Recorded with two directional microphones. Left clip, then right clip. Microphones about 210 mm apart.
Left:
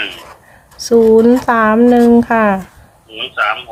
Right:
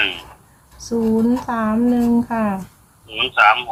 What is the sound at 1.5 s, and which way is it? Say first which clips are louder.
Speech: left 10 dB; 60° left (ahead or behind).